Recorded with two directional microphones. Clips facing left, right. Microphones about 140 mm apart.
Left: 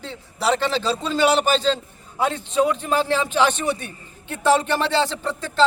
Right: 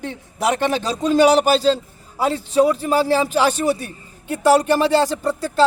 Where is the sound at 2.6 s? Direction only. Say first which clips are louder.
Right 2 dB; 5° right (ahead or behind).